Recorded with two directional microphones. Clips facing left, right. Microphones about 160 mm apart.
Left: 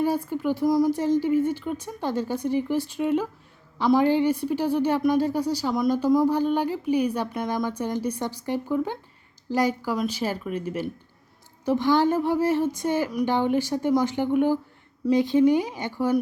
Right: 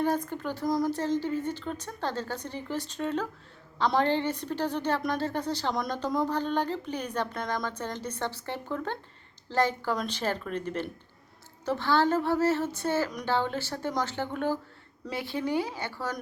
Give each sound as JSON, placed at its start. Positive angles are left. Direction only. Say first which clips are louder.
{"t": 0.0, "sound": "a woman's voice", "louder": "left 4 dB", "side_deg": 10}